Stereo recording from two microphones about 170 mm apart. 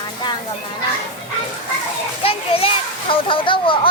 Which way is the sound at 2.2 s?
35° left (ahead or behind).